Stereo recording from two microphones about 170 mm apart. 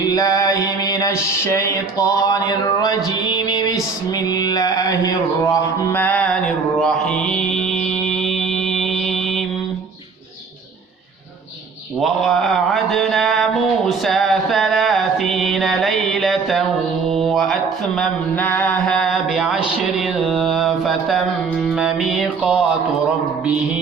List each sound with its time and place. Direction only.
0.0 s music: 20° left (ahead or behind)
5.5 s mantra: 15° left (ahead or behind)
11.9 s a sound: centre (ahead or behind)
17.1 s mantra: centre (ahead or behind)